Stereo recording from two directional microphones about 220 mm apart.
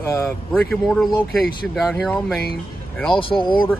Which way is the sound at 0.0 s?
10° left (ahead or behind).